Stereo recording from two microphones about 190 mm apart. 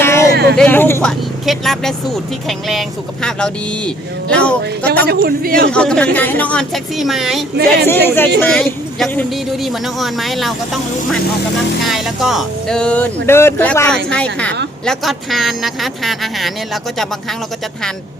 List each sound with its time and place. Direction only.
0.0 s vehicle: 15° left (ahead or behind)
0.5 s speech: 10° left (ahead or behind)
1.5 s speech: centre (ahead or behind)
5.0 s a man's voice: 50° right (ahead or behind)
5.7 s speech: 5° left (ahead or behind)
7.5 s speech: 55° right (ahead or behind)
8.0 s speech: 10° left (ahead or behind)